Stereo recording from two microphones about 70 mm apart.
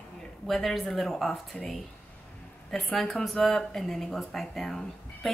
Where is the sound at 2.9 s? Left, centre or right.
Centre.